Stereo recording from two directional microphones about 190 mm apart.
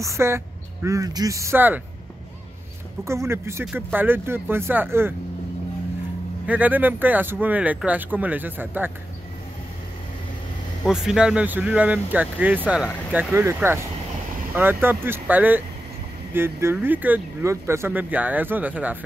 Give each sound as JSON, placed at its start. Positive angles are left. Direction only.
{"t": 0.0, "sound": "speech", "side_deg": -15}
{"t": 3.1, "sound": "speech", "side_deg": -15}
{"t": 6.4, "sound": "speech", "side_deg": -10}
{"t": 10.8, "sound": "speech", "side_deg": -5}